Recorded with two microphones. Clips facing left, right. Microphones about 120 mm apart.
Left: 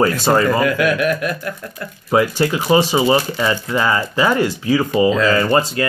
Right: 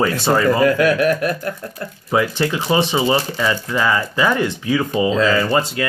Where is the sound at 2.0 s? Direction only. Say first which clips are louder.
Left 3 dB; 30° left (ahead or behind).